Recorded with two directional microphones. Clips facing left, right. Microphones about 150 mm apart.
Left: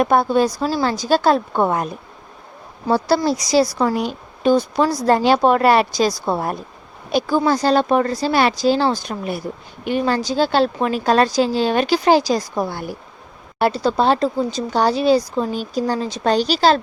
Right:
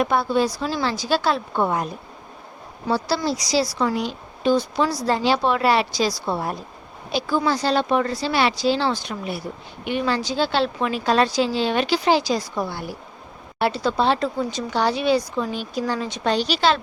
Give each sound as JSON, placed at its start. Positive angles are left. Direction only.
{"t": 0.0, "sound": "speech", "side_deg": 50}
{"t": 3.2, "sound": "speech", "side_deg": 50}